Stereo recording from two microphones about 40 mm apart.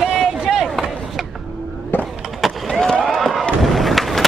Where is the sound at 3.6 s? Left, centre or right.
Centre.